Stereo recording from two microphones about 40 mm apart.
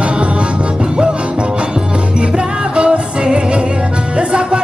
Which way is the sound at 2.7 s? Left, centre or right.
Right.